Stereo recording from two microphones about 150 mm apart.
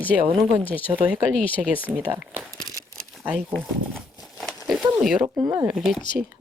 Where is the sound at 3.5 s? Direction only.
5° left (ahead or behind).